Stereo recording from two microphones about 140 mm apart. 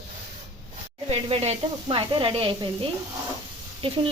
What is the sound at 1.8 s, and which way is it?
Speech, 35° right (ahead or behind).